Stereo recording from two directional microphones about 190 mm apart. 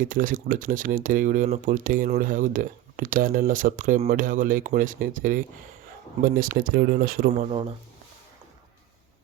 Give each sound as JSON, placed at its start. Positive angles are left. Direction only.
{"t": 0.0, "sound": "speech", "side_deg": -45}